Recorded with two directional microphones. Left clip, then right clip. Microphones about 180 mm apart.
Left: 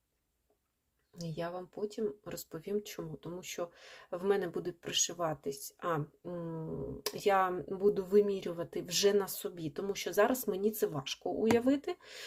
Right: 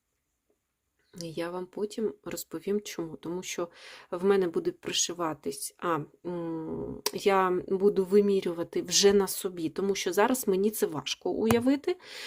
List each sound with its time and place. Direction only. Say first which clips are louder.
1.1 s speech: right 5 dB; 50° right (ahead or behind)